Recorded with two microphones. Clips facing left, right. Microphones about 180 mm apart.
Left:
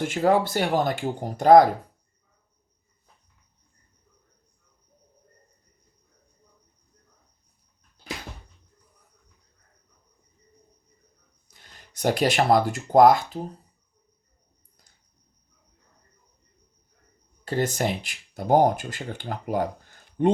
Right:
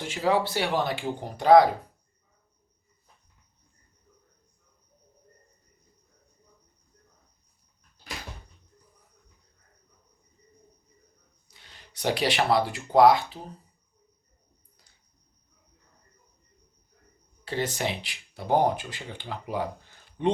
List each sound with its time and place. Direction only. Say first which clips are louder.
0.0 s speech: left 4 dB; 50° left (ahead or behind)
11.4 s speech: left 1 dB; 45° left (ahead or behind)
17.4 s speech: left 4 dB; 45° left (ahead or behind)